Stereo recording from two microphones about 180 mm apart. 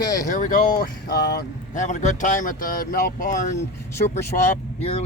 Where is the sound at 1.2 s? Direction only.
65° left (ahead or behind).